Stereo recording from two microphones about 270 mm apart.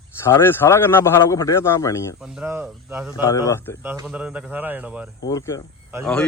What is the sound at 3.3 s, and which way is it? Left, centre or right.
Speech, centre.